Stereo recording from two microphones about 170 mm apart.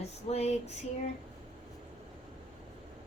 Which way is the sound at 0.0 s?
40° left (ahead or behind).